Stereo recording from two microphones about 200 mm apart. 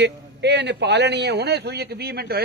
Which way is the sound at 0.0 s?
60° right (ahead or behind).